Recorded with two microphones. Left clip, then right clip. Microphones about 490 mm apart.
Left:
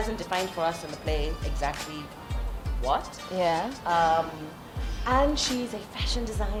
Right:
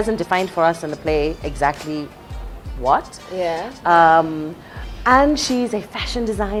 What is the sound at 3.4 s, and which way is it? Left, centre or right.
Speech, centre.